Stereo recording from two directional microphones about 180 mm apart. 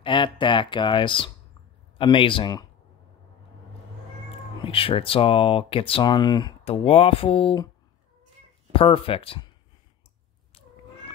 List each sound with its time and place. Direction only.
0.0 s speech: 25° left (ahead or behind)
4.6 s speech: 30° left (ahead or behind)
8.7 s speech: 30° left (ahead or behind)